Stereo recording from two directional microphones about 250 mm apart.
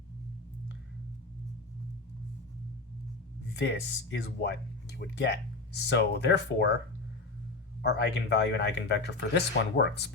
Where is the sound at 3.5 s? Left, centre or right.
Left.